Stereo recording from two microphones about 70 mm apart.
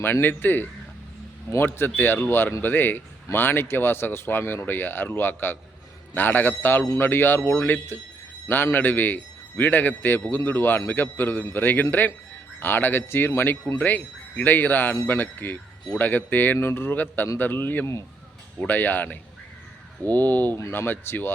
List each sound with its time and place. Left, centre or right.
0.0 s a man's voice: left
20.6 s speech: left
20.8 s speech: left